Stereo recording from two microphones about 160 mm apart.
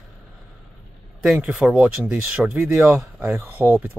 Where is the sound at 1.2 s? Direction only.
5° right (ahead or behind).